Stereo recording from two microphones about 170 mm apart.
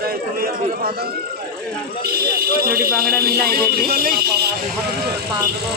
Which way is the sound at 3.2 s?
65° right (ahead or behind).